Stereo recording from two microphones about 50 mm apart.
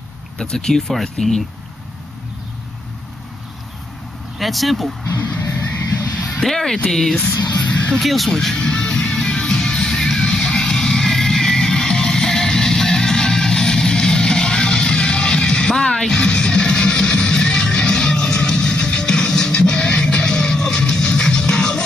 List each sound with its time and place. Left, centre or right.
0.4 s speech: centre
4.4 s speech: centre
5.9 s music: left
6.4 s speech: centre
8.5 s music: centre